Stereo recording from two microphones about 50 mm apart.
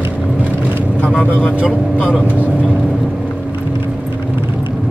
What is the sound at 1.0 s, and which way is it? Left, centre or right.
Speech, left.